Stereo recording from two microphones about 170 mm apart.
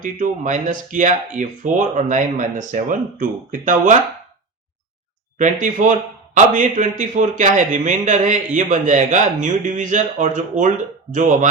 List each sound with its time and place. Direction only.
0.0 s a man's voice: 50° right (ahead or behind)
5.4 s a man's voice: 45° right (ahead or behind)